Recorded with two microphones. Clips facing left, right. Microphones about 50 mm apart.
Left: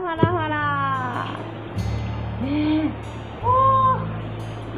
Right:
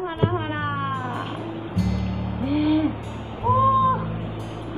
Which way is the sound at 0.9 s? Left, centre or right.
Centre.